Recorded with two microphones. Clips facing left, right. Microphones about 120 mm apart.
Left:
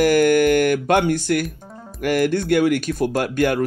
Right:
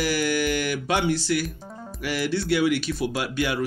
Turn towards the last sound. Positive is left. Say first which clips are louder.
# left 7 dB
turn(degrees=50)  # may be behind; listen again after turning